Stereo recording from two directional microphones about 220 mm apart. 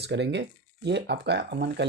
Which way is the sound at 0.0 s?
50° right (ahead or behind).